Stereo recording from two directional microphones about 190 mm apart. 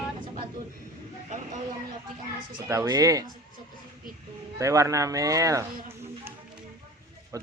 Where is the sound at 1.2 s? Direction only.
40° right (ahead or behind).